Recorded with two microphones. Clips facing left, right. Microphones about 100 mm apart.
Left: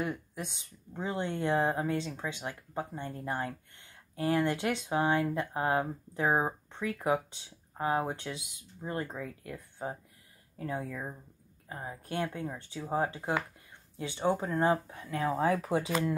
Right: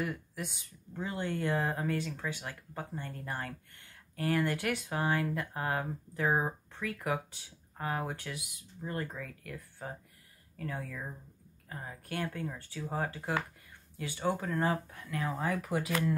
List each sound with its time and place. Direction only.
0.0 s speech: 20° left (ahead or behind)